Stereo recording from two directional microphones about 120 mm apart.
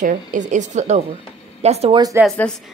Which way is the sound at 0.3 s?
85° right.